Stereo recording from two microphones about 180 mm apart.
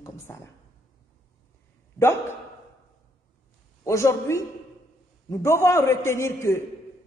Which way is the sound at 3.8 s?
15° left (ahead or behind).